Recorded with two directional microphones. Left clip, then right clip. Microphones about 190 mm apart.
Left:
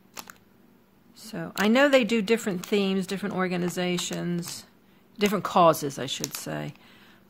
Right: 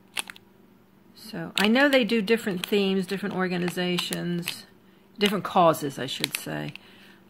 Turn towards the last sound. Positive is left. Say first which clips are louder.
# right 1 dB
turn(degrees=15)  # may be behind; listen again after turning